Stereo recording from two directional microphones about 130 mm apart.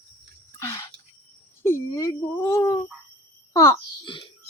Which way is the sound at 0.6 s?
20° left (ahead or behind).